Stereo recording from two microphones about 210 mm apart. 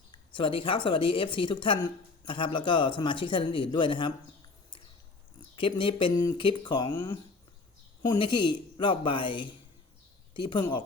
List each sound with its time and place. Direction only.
0.1 s speech: 25° left (ahead or behind)
5.5 s speech: 25° left (ahead or behind)